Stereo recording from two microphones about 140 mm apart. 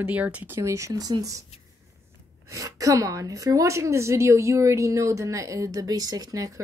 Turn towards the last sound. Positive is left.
turn(degrees=-25)  # may be behind; listen again after turning